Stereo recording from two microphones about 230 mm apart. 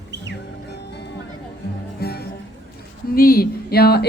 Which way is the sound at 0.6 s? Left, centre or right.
Left.